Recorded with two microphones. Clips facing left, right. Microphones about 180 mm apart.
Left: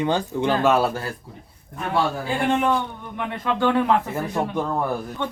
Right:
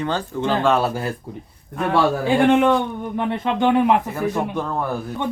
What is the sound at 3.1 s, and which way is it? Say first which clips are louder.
Speech: right 6 dB; 35° right (ahead or behind).